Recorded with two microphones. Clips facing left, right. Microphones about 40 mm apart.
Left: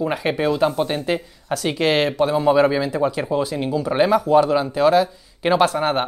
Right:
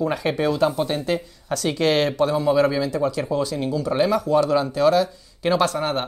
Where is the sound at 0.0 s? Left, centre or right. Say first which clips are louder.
Left 1 dB; left.